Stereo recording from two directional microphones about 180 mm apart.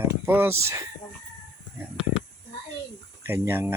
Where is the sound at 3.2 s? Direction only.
10° right (ahead or behind).